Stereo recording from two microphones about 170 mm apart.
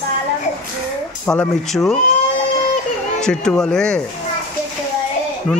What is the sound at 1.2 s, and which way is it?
Speech, 5° left (ahead or behind).